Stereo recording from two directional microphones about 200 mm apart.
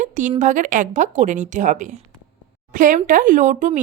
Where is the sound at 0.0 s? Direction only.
40° right (ahead or behind).